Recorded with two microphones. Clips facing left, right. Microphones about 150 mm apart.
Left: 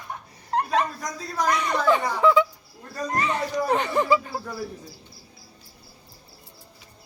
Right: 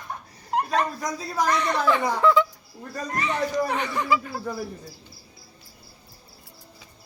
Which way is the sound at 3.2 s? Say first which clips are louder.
Right 1 dB; 40° left (ahead or behind).